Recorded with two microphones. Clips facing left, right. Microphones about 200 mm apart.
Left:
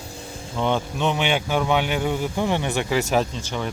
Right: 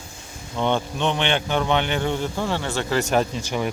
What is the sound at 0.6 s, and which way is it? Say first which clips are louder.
Speech: even; 5° left (ahead or behind).